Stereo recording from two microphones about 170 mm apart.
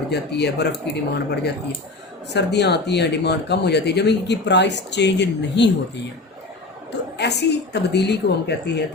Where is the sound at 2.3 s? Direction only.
85° left.